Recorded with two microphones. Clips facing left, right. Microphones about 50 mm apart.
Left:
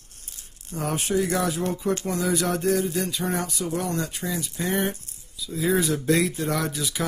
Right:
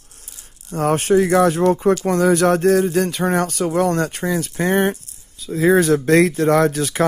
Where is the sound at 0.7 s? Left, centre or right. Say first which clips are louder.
Right 9 dB; right.